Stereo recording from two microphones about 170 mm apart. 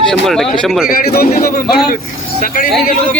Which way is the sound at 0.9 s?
60° left (ahead or behind).